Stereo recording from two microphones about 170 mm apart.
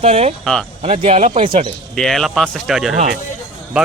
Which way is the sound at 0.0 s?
35° right (ahead or behind).